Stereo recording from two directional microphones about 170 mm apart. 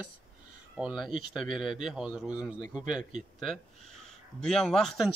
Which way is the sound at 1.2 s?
30° left (ahead or behind).